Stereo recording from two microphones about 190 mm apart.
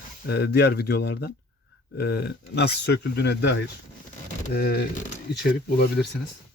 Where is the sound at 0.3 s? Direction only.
55° left (ahead or behind).